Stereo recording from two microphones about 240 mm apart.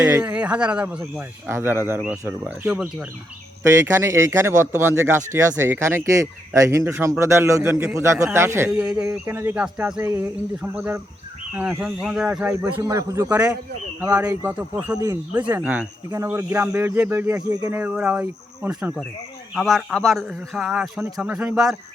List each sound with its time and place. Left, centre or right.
0.0 s speech: centre